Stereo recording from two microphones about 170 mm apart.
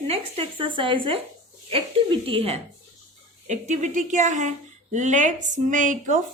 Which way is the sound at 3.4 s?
45° right (ahead or behind).